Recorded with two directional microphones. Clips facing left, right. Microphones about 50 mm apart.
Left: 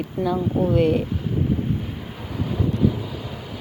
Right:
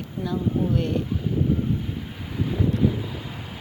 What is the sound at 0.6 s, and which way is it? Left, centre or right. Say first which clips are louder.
Speech: left 5 dB; centre.